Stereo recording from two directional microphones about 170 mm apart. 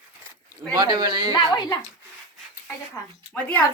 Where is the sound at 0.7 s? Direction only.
25° right (ahead or behind).